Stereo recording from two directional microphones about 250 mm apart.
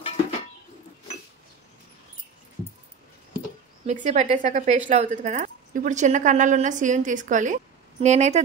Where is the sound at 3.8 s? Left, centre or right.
Right.